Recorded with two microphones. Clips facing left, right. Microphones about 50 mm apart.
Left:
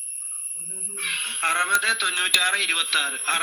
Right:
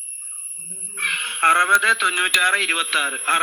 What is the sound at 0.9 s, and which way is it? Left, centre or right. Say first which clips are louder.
Speech: right 6 dB; right.